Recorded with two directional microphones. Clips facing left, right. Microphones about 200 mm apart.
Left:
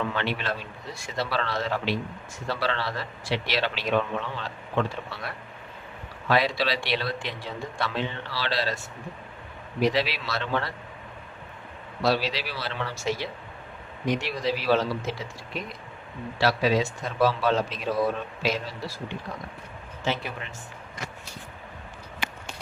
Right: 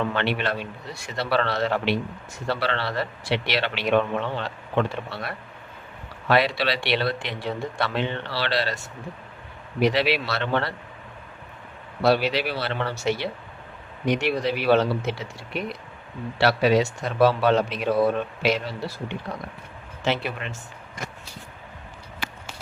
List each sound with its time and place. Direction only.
0.1 s a man's voice: 65° right (ahead or behind)
9.8 s a man's voice: 65° right (ahead or behind)
12.0 s a man's voice: 60° right (ahead or behind)